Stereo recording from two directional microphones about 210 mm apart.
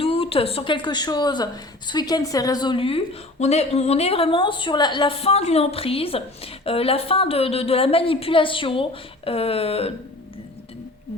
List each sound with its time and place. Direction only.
0.0 s a woman's voice: 30° left (ahead or behind)